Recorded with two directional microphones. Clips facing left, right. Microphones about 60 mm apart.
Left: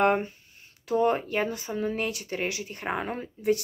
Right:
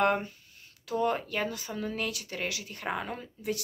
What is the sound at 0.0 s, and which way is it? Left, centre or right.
Speech, left.